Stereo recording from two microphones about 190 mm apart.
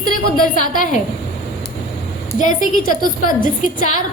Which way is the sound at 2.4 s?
45° left (ahead or behind).